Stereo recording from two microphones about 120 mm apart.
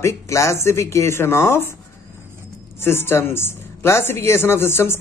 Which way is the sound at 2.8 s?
20° left (ahead or behind).